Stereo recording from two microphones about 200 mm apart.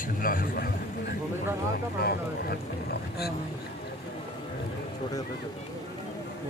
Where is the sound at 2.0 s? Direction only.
50° left (ahead or behind).